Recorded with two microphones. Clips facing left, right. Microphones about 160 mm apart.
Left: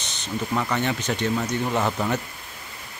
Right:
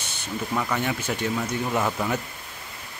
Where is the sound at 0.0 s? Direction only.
10° right (ahead or behind).